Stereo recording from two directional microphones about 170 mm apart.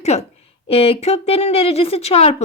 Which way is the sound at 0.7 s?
35° left (ahead or behind).